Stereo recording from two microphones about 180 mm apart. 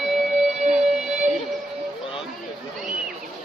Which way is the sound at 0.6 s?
40° right (ahead or behind).